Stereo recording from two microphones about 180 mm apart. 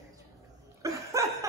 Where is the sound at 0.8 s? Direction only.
15° right (ahead or behind).